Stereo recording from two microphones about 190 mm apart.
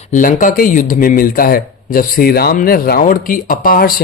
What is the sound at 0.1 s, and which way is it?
Speech, 45° left (ahead or behind).